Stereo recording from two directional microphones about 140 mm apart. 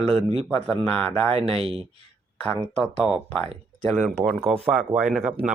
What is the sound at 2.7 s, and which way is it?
Speech, 10° left (ahead or behind).